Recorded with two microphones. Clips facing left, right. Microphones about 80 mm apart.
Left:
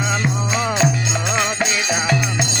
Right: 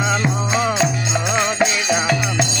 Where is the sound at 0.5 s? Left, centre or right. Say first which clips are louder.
Even; centre.